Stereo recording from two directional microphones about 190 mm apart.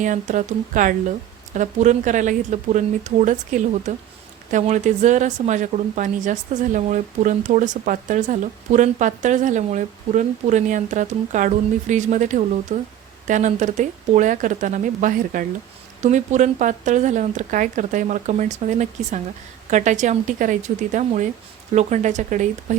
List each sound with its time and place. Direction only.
0.0 s a woman's voice: 40° right (ahead or behind)